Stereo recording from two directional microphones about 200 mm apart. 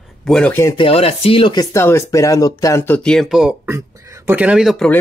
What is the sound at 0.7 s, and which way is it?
Speech, 30° left (ahead or behind).